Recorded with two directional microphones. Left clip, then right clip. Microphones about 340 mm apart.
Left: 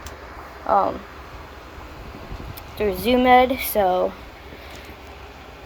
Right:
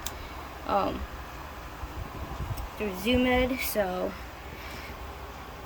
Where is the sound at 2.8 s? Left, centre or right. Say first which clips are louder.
Left 9 dB; left.